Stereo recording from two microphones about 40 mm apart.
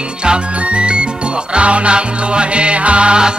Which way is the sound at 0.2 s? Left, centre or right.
Right.